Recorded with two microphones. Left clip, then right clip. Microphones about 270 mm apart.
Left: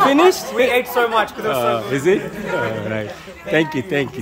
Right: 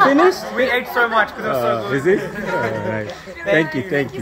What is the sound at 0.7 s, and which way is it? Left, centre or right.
Speech, left.